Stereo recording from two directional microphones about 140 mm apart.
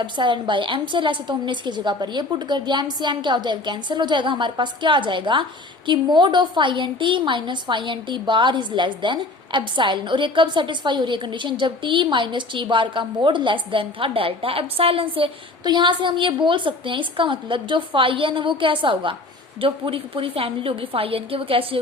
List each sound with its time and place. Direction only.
0.0 s a woman's voice: 35° right (ahead or behind)